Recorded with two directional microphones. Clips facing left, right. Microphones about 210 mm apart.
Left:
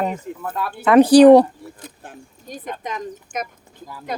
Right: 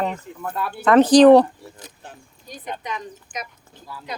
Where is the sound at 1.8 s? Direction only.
50° left (ahead or behind).